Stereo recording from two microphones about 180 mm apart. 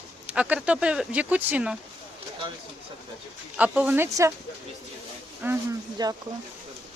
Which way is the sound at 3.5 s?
5° right (ahead or behind).